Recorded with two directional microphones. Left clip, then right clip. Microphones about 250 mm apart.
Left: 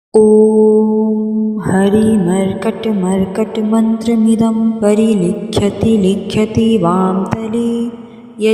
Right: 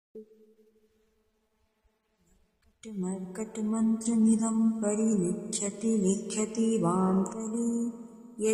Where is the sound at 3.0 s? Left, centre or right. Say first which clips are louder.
Left 18 dB; left.